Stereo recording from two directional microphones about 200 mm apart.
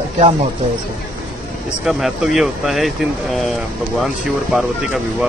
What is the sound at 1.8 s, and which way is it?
Speech, centre (ahead or behind).